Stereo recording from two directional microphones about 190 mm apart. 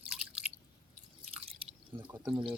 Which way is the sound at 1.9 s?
10° right (ahead or behind).